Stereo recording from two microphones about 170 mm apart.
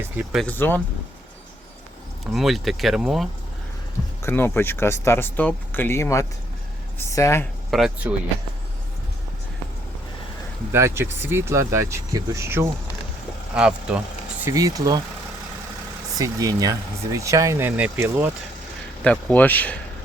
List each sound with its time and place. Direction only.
0.4 s speech: 10° left (ahead or behind)
2.2 s speech: centre (ahead or behind)
4.2 s speech: 15° left (ahead or behind)
7.7 s speech: 5° right (ahead or behind)
10.7 s speech: 15° right (ahead or behind)
14.4 s speech: 20° right (ahead or behind)
16.1 s speech: 20° right (ahead or behind)
19.0 s speech: 10° left (ahead or behind)